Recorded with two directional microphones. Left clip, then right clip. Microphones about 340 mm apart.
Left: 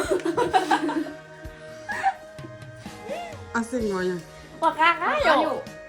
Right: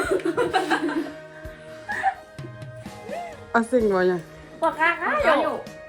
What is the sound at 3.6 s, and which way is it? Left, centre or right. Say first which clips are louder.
Speech: right 7 dB; centre.